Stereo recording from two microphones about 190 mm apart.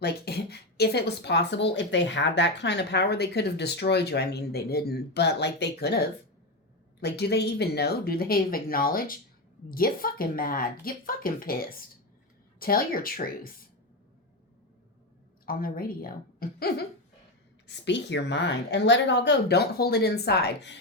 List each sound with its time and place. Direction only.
0.0 s speech: 60° left (ahead or behind)
7.0 s speech: 60° left (ahead or behind)
15.4 s speech: 50° left (ahead or behind)
17.7 s speech: 65° left (ahead or behind)